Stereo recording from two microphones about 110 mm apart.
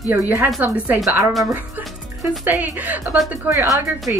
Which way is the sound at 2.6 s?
15° right (ahead or behind).